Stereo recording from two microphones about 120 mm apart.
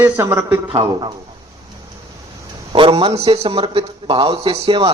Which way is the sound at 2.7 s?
45° right (ahead or behind).